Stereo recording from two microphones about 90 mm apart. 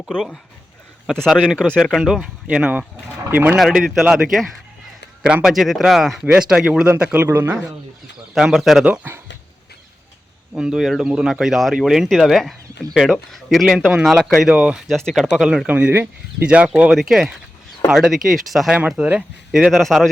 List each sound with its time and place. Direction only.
0.1 s speech: 5° left (ahead or behind); by 3.6 s 20° right (ahead or behind)
4.0 s speech: 5° right (ahead or behind)
7.0 s a man's voice: 20° right (ahead or behind)
8.4 s speech: 5° right (ahead or behind)
8.8 s speech: 15° right (ahead or behind)
10.6 s speech: 5° right (ahead or behind)
14.8 s speech: centre (ahead or behind)
15.4 s speech: 10° right (ahead or behind)
16.9 s speech: 5° right (ahead or behind)